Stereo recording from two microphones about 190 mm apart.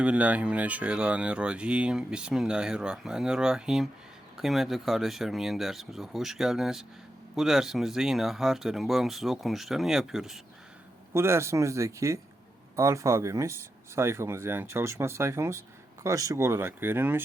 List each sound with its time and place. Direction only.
0.0 s speech: 5° right (ahead or behind)
11.1 s speech: 15° right (ahead or behind)